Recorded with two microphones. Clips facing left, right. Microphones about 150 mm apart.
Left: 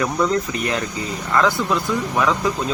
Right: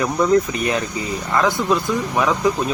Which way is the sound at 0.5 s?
20° right (ahead or behind).